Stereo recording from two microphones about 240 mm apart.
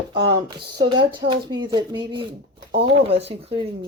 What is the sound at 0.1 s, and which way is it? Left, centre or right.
Speech, right.